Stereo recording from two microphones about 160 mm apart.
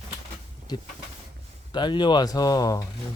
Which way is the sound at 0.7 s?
25° left (ahead or behind).